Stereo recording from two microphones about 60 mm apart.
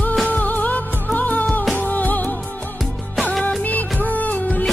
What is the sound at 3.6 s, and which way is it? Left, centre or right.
Music of bollywood, left.